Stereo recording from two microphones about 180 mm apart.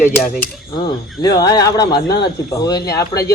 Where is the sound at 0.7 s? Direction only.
20° left (ahead or behind).